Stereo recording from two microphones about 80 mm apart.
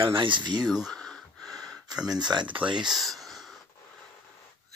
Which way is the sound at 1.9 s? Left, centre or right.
Centre.